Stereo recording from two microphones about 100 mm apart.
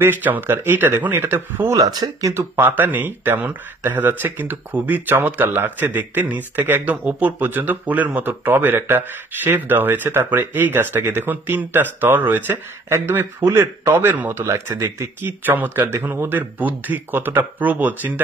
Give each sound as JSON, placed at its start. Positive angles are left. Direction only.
{"t": 0.0, "sound": "speech", "side_deg": -20}
{"t": 1.8, "sound": "speech", "side_deg": -40}
{"t": 2.3, "sound": "speech", "side_deg": -20}